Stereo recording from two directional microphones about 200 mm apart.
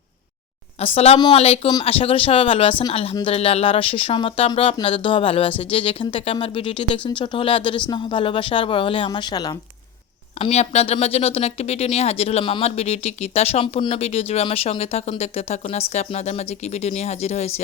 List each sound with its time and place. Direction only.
0.8 s speech: 30° left (ahead or behind)
10.4 s speech: 35° left (ahead or behind)